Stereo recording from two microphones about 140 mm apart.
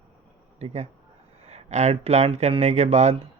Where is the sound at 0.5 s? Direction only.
55° right (ahead or behind).